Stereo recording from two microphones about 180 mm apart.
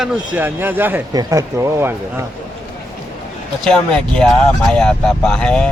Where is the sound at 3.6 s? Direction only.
5° left (ahead or behind).